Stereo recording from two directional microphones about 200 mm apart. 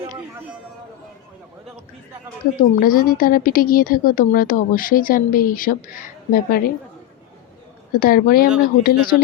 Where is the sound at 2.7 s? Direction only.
45° left (ahead or behind).